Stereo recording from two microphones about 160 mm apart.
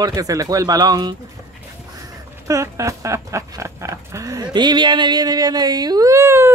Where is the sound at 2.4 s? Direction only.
20° right (ahead or behind).